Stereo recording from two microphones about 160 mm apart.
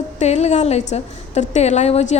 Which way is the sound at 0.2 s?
45° left (ahead or behind).